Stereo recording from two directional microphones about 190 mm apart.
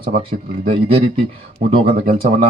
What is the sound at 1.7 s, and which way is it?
Speech, 30° right (ahead or behind).